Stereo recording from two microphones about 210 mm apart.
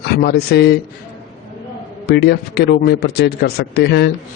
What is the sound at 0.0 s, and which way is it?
Speech, 50° left (ahead or behind).